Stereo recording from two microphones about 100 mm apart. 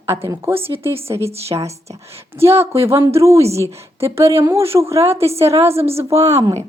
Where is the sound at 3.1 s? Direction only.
30° right (ahead or behind).